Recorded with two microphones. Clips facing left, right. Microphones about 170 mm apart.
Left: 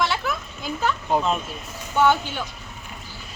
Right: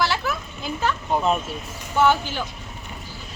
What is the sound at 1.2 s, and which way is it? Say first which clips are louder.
Speech: right 2 dB; 5° right (ahead or behind).